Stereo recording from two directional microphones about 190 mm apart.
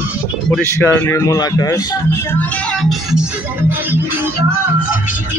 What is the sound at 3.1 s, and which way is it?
Music, 5° right (ahead or behind).